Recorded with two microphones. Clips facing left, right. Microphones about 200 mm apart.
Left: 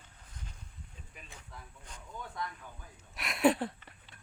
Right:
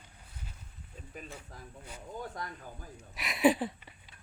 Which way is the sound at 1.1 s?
40° right (ahead or behind).